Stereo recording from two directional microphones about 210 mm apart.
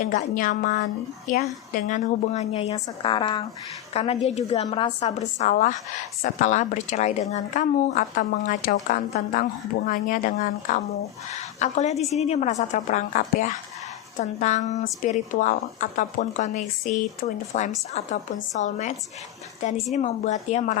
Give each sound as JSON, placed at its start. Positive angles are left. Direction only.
{"t": 0.1, "sound": "a woman's voice", "side_deg": 40}